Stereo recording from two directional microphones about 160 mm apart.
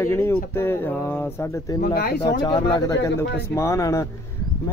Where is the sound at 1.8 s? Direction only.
65° left (ahead or behind).